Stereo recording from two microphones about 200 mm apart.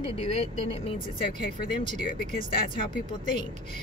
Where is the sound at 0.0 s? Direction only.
30° left (ahead or behind).